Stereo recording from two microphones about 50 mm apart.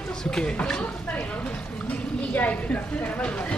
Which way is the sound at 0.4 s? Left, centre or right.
Centre.